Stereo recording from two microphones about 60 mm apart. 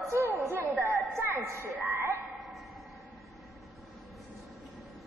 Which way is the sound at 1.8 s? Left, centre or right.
Right.